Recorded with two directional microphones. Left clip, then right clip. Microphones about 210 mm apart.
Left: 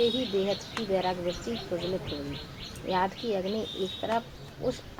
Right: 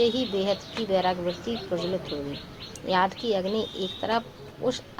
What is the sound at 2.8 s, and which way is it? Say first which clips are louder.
Speech: right 4 dB; 20° right (ahead or behind).